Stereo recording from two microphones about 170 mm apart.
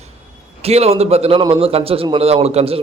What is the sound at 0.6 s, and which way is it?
A man's voice, 40° right (ahead or behind).